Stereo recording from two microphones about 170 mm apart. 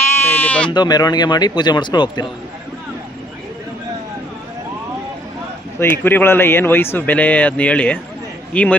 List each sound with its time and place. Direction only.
0.0 s sheep: 15° left (ahead or behind)
0.7 s speech: 25° left (ahead or behind)
5.8 s speech: 10° left (ahead or behind)